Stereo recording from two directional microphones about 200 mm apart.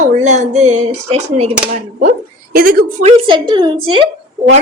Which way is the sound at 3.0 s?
30° right (ahead or behind).